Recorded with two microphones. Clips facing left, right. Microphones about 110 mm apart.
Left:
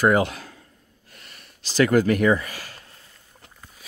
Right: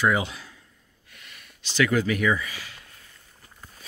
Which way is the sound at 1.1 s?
40° left (ahead or behind).